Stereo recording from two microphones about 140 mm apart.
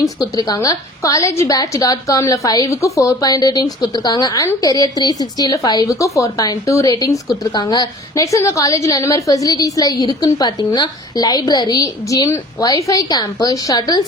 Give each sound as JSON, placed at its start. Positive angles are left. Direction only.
{"t": 0.0, "sound": "a woman's voice", "side_deg": 30}